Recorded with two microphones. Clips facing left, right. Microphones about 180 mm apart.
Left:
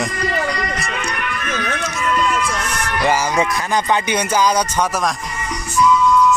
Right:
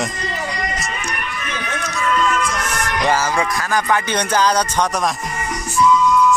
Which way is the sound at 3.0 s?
15° left (ahead or behind).